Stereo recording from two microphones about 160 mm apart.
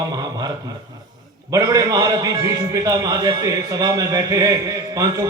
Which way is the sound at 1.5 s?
20° right (ahead or behind).